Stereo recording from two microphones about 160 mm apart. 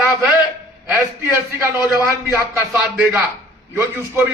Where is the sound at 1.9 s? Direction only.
15° right (ahead or behind).